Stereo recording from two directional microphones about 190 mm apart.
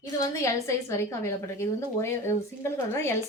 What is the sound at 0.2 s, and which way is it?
A woman's voice, 15° left (ahead or behind).